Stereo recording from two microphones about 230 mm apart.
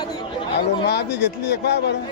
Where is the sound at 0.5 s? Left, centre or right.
Left.